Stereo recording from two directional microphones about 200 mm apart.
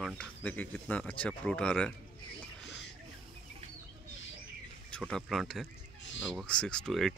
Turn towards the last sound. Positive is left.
turn(degrees=0)  # may be behind; listen again after turning